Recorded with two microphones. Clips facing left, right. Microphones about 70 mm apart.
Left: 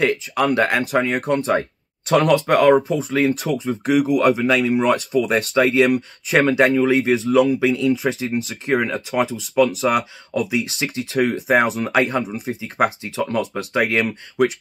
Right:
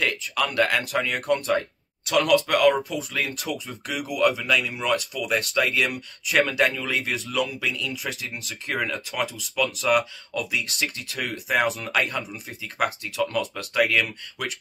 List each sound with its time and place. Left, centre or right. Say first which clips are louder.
0.0 s speech: left 7 dB; left